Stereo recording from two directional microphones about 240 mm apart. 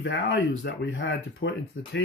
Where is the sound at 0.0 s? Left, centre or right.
Left.